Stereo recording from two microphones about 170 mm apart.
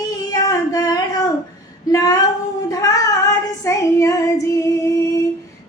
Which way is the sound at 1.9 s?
20° left (ahead or behind).